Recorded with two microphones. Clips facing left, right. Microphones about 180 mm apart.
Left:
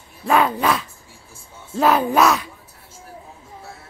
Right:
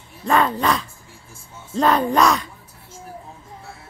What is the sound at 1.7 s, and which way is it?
Speech, 5° left (ahead or behind).